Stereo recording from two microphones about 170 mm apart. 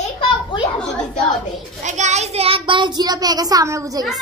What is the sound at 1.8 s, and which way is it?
Child singing, 45° right (ahead or behind).